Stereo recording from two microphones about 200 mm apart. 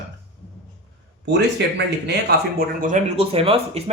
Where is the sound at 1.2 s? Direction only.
55° right (ahead or behind).